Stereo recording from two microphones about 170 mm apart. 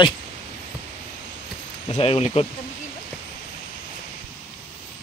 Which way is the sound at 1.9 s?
35° left (ahead or behind).